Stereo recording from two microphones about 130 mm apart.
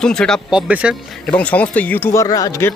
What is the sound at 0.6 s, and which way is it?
Speech, 10° right (ahead or behind).